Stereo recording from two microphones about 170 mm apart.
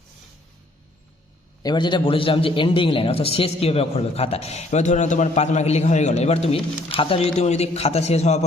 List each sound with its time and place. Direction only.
1.6 s a man's voice: 25° left (ahead or behind)